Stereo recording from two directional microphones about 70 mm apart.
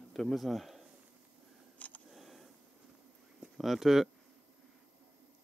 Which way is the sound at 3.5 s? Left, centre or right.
Centre.